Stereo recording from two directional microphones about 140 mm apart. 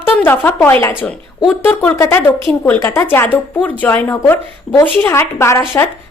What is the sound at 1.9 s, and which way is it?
A woman's voice, 15° left (ahead or behind).